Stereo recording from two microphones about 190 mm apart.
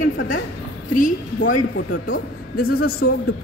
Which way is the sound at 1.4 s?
70° left (ahead or behind).